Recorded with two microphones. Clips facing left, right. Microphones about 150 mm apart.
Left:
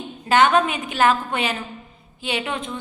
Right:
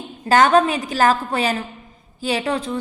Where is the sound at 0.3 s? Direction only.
40° right (ahead or behind).